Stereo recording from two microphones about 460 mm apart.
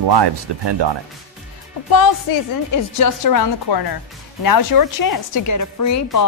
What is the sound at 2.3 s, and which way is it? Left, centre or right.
A woman's voice, left.